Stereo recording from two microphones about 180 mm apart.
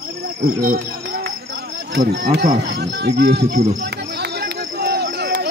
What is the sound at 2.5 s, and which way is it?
Speech, 70° right (ahead or behind).